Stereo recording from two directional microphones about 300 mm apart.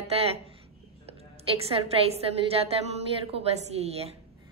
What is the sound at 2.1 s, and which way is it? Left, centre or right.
A woman's voice, centre.